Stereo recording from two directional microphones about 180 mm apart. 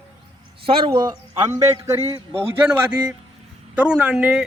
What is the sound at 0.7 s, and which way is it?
A man's voice, 30° right (ahead or behind).